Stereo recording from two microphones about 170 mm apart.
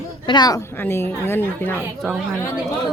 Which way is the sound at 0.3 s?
25° left (ahead or behind).